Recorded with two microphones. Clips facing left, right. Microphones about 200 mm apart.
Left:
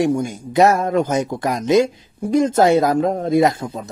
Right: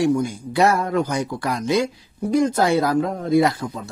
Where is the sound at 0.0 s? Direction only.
20° left (ahead or behind).